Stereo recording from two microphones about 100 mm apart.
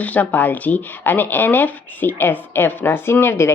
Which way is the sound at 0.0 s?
15° left (ahead or behind).